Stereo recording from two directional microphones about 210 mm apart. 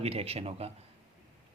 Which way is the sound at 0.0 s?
30° right (ahead or behind).